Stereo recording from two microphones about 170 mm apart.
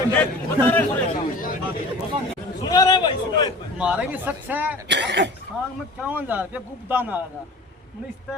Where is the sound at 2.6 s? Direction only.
25° left (ahead or behind).